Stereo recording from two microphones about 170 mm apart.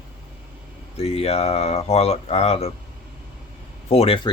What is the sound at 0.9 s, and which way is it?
Speech, 35° left (ahead or behind).